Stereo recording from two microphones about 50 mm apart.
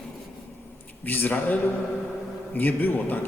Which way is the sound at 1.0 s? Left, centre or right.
Left.